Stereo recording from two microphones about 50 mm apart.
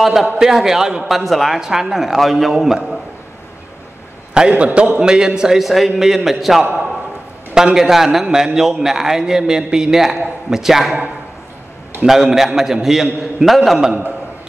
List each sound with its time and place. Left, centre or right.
0.0 s a man's voice: centre
4.3 s a man's voice: right
5.0 s a man's voice: centre
12.1 s a man's voice: centre